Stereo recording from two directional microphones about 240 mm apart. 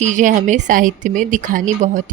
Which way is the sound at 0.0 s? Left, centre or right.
Right.